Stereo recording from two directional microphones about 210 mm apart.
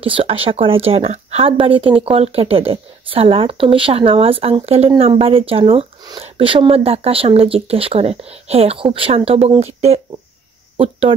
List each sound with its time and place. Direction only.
0.0 s speech: 25° right (ahead or behind)